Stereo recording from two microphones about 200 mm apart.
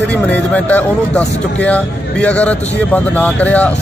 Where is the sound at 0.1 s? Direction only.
5° left (ahead or behind).